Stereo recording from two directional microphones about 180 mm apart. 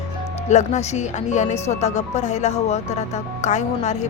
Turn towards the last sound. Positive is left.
turn(degrees=40)  # may be behind; listen again after turning